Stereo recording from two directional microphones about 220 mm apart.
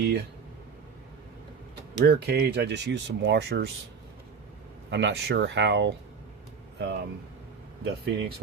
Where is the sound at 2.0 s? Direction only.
50° right (ahead or behind).